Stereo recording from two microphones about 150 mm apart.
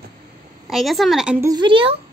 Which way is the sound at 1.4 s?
30° right (ahead or behind).